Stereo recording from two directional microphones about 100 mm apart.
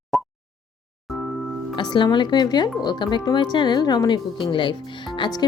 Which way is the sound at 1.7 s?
50° left (ahead or behind).